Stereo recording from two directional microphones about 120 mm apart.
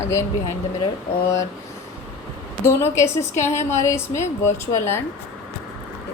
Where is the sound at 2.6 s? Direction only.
20° left (ahead or behind).